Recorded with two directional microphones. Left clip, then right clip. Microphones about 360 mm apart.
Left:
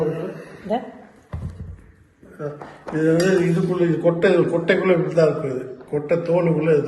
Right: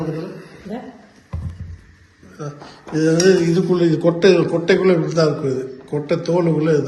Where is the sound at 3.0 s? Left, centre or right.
Centre.